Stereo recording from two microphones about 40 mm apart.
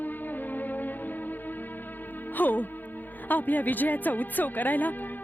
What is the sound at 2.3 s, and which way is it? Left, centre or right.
Speech, left.